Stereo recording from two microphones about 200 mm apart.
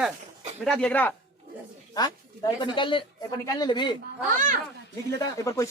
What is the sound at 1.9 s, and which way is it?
Speech, 20° left (ahead or behind).